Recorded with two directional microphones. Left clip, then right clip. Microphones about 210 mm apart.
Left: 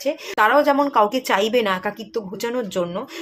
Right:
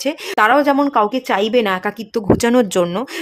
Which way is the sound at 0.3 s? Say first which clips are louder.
Right 3 dB; 30° right (ahead or behind).